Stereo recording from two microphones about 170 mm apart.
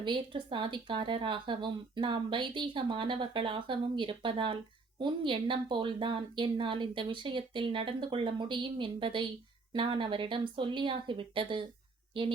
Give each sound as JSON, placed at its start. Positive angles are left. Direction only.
{"t": 0.0, "sound": "a woman's voice", "side_deg": -30}